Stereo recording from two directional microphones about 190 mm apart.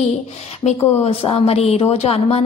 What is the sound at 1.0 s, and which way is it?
Speech, 35° left (ahead or behind).